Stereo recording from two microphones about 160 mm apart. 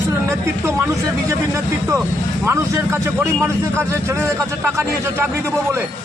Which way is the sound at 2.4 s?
20° right (ahead or behind).